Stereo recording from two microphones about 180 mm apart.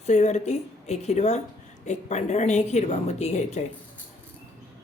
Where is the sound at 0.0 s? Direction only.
40° left (ahead or behind).